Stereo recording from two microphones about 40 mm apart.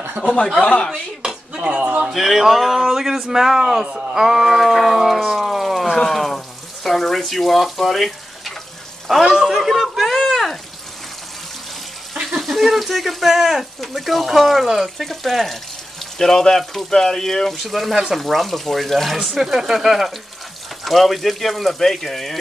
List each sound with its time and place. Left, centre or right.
0.2 s speech: centre
0.6 s speech: left
1.6 s speech: right
2.1 s speech: centre
9.3 s a sound: centre
12.1 s a sound: centre
12.4 s speech: centre
17.6 s speech: centre
17.9 s speech: centre
18.2 s speech: centre